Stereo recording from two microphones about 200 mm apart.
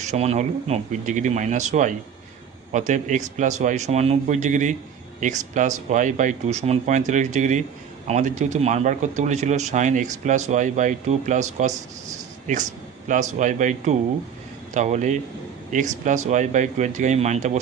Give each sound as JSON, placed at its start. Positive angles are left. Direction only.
{"t": 0.0, "sound": "a man's voice", "side_deg": -35}
{"t": 13.1, "sound": "a man's voice", "side_deg": -40}